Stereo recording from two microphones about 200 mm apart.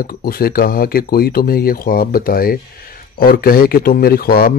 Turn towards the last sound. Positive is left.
turn(degrees=50)  # may be behind; listen again after turning